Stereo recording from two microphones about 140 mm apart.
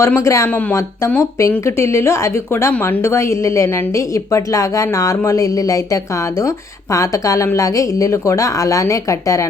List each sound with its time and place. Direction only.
0.0 s a woman's voice: 20° left (ahead or behind)